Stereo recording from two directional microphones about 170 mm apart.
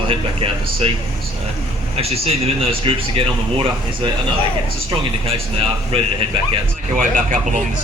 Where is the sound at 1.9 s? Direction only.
35° right (ahead or behind).